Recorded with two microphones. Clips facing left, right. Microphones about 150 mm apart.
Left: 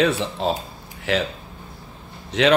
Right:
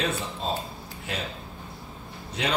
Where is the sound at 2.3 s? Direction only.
90° left.